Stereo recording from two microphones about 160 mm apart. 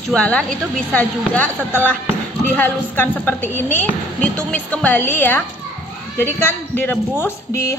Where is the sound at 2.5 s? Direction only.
10° left (ahead or behind).